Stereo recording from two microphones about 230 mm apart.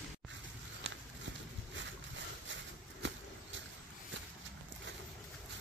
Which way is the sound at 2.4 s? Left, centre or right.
Right.